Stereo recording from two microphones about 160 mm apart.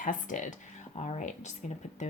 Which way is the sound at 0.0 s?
55° left (ahead or behind).